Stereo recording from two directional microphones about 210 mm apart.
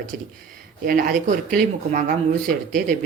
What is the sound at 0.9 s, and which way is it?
Speech, 40° right (ahead or behind).